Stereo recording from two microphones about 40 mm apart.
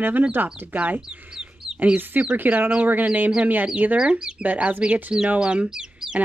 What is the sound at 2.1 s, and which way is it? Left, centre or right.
Speech, right.